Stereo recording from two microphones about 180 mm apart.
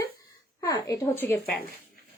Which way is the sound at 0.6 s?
20° left (ahead or behind).